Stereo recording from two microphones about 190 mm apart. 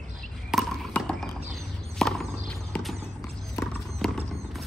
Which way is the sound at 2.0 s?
Centre (ahead or behind).